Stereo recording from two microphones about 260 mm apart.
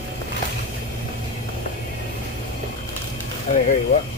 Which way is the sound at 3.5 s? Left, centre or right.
Left.